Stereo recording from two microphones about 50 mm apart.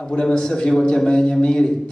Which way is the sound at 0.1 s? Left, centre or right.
Centre.